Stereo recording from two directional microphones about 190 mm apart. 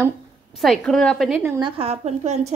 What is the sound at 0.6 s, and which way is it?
Speech, centre (ahead or behind).